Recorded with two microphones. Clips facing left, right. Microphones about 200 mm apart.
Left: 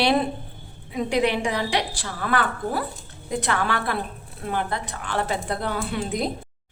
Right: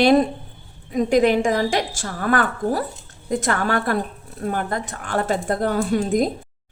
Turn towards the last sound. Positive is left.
turn(degrees=-45)  # may be behind; listen again after turning